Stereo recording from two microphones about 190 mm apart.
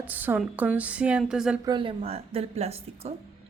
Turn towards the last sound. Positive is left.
turn(degrees=-35)  # may be behind; listen again after turning